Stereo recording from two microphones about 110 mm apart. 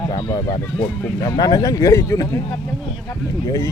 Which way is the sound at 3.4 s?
35° left (ahead or behind).